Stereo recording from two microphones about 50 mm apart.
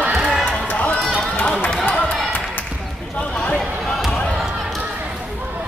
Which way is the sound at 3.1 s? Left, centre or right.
Left.